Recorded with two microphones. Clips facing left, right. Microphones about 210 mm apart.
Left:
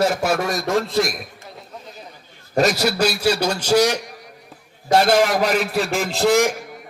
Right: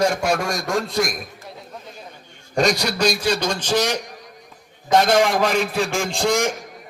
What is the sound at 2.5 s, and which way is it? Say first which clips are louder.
A man's voice: left 2 dB; 5° left (ahead or behind).